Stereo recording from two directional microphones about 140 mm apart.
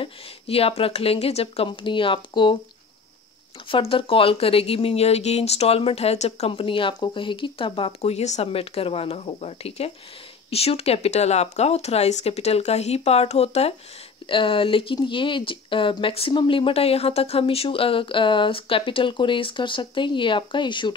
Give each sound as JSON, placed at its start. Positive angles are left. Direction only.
{"t": 0.0, "sound": "speech", "side_deg": 45}
{"t": 3.9, "sound": "speech", "side_deg": 40}